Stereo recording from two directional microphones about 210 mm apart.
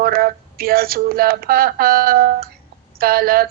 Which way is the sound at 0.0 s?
45° right (ahead or behind).